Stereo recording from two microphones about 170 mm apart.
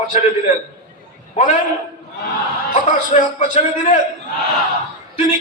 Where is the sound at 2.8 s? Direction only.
45° left (ahead or behind).